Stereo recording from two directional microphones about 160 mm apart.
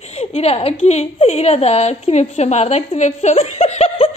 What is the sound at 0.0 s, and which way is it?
A woman's voice, 40° left (ahead or behind).